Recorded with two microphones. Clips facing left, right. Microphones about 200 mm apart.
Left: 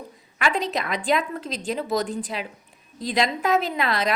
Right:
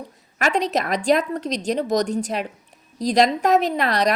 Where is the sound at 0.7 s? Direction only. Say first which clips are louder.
Right 5 dB; 40° right (ahead or behind).